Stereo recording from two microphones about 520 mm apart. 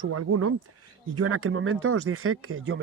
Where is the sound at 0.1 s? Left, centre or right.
Right.